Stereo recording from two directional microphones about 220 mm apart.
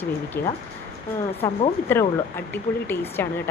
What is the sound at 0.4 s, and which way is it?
Speech, 45° left (ahead or behind).